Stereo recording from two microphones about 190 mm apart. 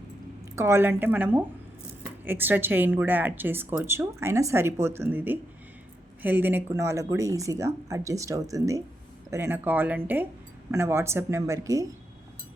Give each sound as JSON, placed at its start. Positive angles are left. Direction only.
{"t": 0.5, "sound": "speech", "side_deg": -15}